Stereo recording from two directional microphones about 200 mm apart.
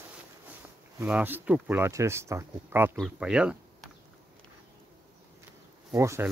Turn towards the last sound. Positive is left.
turn(degrees=-15)  # may be behind; listen again after turning